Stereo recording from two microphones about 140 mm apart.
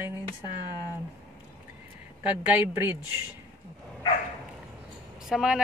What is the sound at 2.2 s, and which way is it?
Speech, 10° right (ahead or behind).